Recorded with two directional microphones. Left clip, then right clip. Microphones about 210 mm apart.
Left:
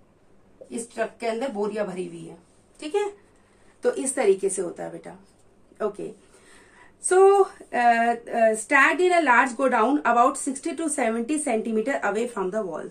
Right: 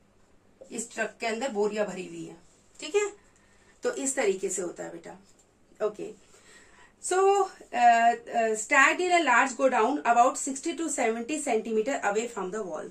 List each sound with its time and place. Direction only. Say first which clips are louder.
0.7 s speech: left 4 dB; 10° left (ahead or behind)
3.8 s a woman's voice: left 5 dB; 25° left (ahead or behind)
7.7 s a woman's voice: even; 30° left (ahead or behind)